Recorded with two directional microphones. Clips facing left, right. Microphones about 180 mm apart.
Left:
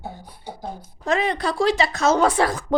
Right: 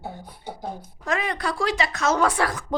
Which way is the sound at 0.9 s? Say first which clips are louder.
Left 5 dB; 25° left (ahead or behind).